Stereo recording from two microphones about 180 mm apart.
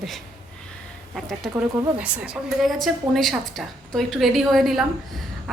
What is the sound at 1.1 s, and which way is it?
A woman's voice, centre (ahead or behind).